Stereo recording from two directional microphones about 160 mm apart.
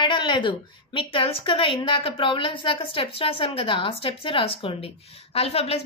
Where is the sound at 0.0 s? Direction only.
30° left (ahead or behind).